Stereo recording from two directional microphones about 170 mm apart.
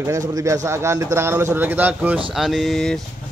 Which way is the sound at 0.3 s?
20° right (ahead or behind).